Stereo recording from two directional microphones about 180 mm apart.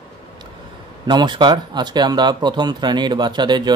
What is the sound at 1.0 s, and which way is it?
Speech, 25° right (ahead or behind).